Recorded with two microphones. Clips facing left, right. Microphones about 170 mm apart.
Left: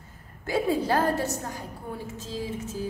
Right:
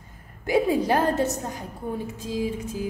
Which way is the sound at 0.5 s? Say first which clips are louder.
Right 4 dB; 15° right (ahead or behind).